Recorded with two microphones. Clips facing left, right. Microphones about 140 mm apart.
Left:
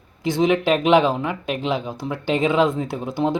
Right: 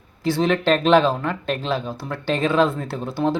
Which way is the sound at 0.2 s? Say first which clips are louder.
Left 1 dB; 15° left (ahead or behind).